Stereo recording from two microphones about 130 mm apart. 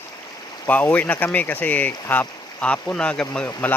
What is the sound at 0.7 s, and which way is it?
Speech, 10° left (ahead or behind).